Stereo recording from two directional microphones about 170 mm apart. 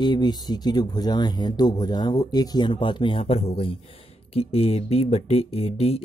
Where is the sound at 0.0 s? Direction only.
25° left (ahead or behind).